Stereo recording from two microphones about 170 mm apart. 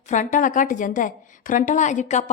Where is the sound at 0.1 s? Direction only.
50° left (ahead or behind).